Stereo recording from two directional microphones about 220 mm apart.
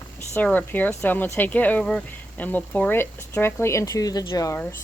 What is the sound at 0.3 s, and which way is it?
Speech, 10° left (ahead or behind).